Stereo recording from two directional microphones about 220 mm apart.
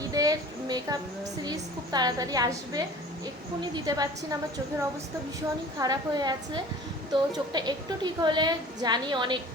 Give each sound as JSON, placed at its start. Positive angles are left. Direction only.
{"t": 0.0, "sound": "a sound", "side_deg": -15}
{"t": 1.5, "sound": "a woman's voice", "side_deg": -20}
{"t": 5.8, "sound": "a woman's voice", "side_deg": -20}